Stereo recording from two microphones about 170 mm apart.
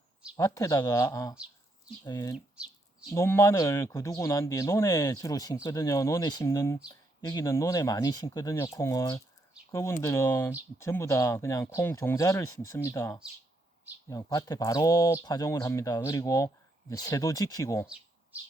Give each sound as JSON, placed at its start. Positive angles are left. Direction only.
{"t": 0.3, "sound": "speech", "side_deg": 20}
{"t": 2.3, "sound": "bird", "side_deg": -5}
{"t": 3.2, "sound": "speech", "side_deg": 15}
{"t": 17.8, "sound": "bird", "side_deg": -5}